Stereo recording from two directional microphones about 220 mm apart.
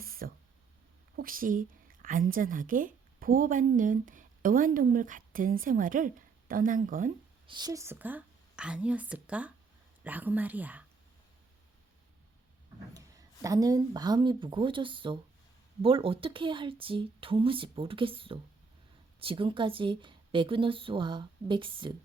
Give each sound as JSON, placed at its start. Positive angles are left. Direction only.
{"t": 0.0, "sound": "a sound", "side_deg": -40}
{"t": 1.1, "sound": "a woman's voice", "side_deg": -40}
{"t": 7.4, "sound": "a woman's voice", "side_deg": -20}
{"t": 12.9, "sound": "a woman's voice", "side_deg": -15}